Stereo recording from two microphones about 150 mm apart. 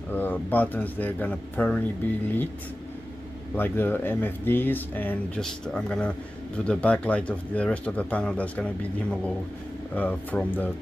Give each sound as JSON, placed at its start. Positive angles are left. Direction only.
{"t": 0.1, "sound": "speech", "side_deg": 10}
{"t": 3.5, "sound": "speech", "side_deg": 15}